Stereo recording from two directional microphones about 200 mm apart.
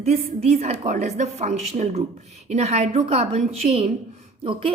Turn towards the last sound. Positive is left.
turn(degrees=-30)  # may be behind; listen again after turning